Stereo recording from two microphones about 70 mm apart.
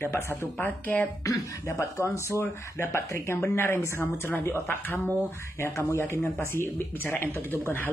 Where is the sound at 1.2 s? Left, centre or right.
Left.